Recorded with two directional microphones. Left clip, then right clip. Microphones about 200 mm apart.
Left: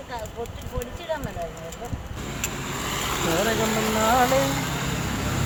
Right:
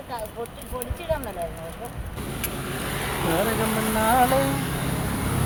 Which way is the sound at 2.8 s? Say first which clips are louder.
Left 1 dB; 60° left (ahead or behind).